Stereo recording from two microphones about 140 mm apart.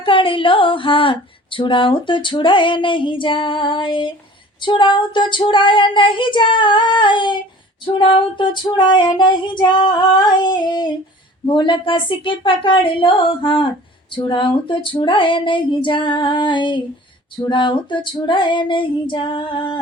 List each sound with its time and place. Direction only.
0.0 s female singing: 40° left (ahead or behind)